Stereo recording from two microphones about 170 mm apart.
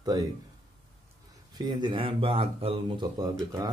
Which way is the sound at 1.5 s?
25° right (ahead or behind).